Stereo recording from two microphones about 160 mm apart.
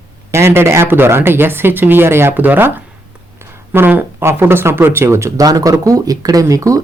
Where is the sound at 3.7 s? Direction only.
15° right (ahead or behind).